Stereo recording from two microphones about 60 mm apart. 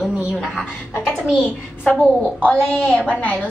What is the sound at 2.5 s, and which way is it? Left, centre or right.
Speech, left.